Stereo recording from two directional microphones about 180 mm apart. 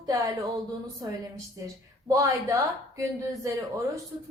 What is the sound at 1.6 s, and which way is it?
Speech, 20° right (ahead or behind).